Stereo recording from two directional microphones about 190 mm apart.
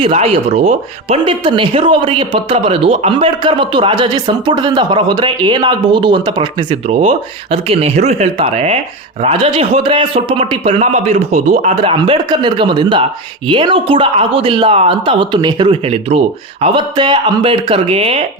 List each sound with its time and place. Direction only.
0.0 s speech: 35° right (ahead or behind)